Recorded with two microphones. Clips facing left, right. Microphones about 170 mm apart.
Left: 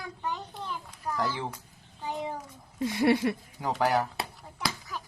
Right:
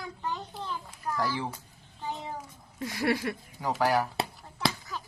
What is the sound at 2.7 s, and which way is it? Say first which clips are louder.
Speech: left 5 dB; 25° left (ahead or behind).